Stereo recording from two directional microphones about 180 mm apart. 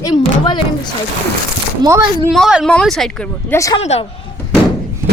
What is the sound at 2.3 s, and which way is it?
Speech, centre (ahead or behind).